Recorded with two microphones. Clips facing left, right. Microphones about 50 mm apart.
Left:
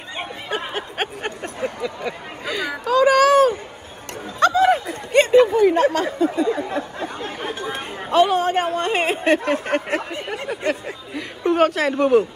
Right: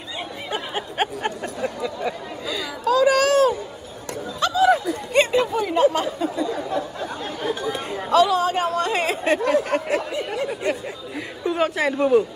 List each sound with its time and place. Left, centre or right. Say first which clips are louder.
2.4 s chatter: left 5 dB; left
2.9 s a sound: left 3 dB; centre
4.4 s snicker: left 2 dB; left
6.0 s speech: left 4 dB; left
11.4 s a woman's voice: left 4 dB; left